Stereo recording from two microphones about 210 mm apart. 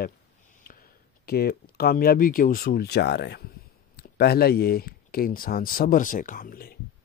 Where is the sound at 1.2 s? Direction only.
45° left (ahead or behind).